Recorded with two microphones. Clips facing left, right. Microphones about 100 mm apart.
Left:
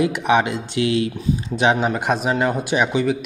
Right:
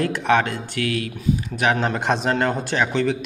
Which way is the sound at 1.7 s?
5° left (ahead or behind).